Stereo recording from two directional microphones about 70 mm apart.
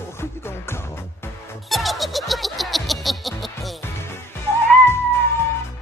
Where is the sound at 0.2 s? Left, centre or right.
Left.